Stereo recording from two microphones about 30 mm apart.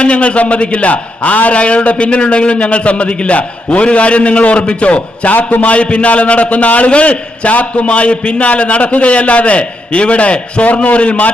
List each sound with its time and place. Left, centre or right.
0.0 s a man's voice: left
5.2 s a man's voice: left
5.6 s a man's voice: left
7.5 s a man's voice: left